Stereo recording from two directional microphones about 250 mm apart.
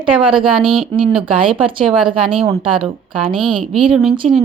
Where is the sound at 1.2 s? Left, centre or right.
Right.